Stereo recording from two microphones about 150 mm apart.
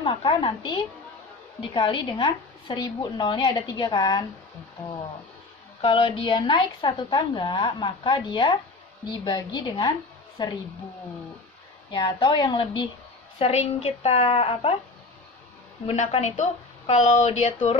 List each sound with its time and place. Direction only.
0.0 s a woman's voice: 35° left (ahead or behind)
5.8 s a woman's voice: 40° left (ahead or behind)
11.9 s a woman's voice: 30° left (ahead or behind)
13.4 s a woman's voice: 45° left (ahead or behind)
15.9 s a woman's voice: 50° left (ahead or behind)